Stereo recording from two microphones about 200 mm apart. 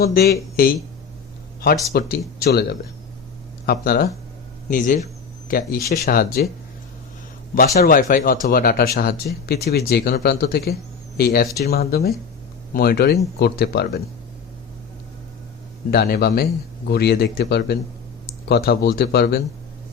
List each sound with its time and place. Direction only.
0.0 s speech: 50° left (ahead or behind)
1.9 s speech: 50° left (ahead or behind)
7.5 s speech: 50° left (ahead or behind)
15.9 s speech: 50° left (ahead or behind)